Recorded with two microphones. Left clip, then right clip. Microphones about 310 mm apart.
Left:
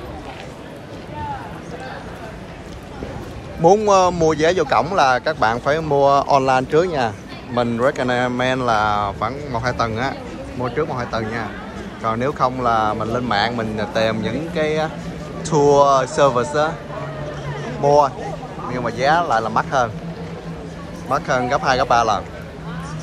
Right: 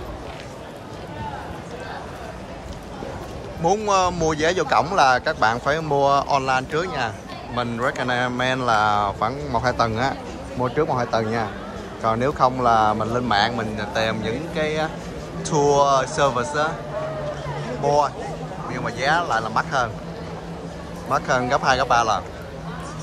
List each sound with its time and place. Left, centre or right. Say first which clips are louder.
3.6 s speech: left 6 dB; centre
17.8 s speech: left 5 dB; centre
21.1 s speech: left 2 dB; centre